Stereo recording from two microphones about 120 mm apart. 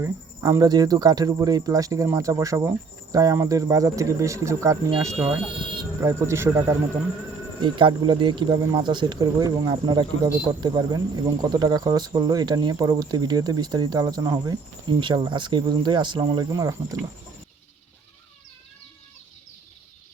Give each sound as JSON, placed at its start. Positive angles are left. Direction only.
{"t": 0.0, "sound": "speech", "side_deg": -20}
{"t": 0.6, "sound": "speech", "side_deg": -35}
{"t": 5.1, "sound": "speech", "side_deg": -10}
{"t": 6.0, "sound": "speech", "side_deg": -20}
{"t": 7.6, "sound": "speech", "side_deg": -40}